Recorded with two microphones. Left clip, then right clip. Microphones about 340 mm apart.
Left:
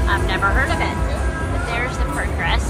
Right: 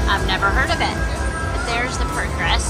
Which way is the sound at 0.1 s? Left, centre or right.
Centre.